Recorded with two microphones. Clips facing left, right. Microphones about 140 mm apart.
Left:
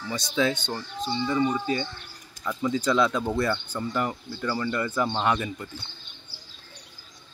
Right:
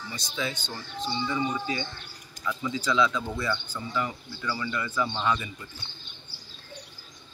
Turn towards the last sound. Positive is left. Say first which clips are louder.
# left 3 dB
turn(degrees=60)  # may be behind; listen again after turning